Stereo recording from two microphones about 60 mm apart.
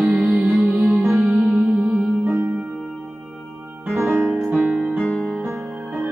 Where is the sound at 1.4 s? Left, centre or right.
Centre.